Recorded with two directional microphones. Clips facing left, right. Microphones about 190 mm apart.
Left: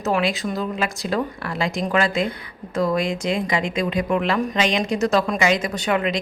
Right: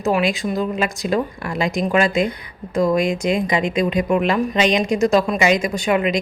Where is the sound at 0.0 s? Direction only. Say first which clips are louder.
Right 3 dB; 15° right (ahead or behind).